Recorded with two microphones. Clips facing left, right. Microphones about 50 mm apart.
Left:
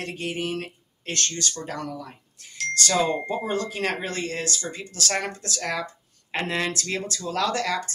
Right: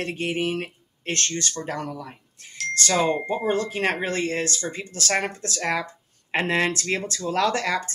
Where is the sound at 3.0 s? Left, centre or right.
Right.